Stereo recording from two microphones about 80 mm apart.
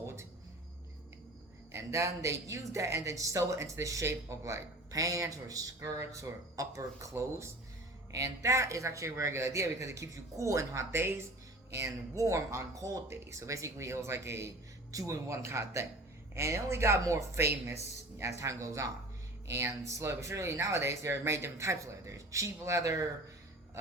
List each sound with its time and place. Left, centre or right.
1.7 s speech: right